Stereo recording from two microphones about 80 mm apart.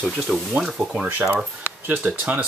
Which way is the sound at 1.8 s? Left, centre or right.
Right.